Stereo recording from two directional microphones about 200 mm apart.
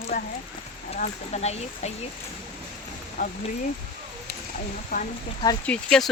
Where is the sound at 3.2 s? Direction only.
45° left (ahead or behind).